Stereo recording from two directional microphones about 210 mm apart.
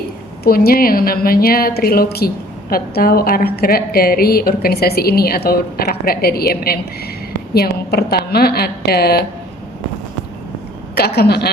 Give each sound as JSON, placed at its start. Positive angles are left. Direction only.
{"t": 0.4, "sound": "a woman's voice", "side_deg": 45}
{"t": 10.9, "sound": "a woman's voice", "side_deg": 50}